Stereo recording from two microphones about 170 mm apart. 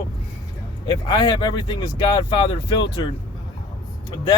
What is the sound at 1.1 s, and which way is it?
Speech, 25° left (ahead or behind).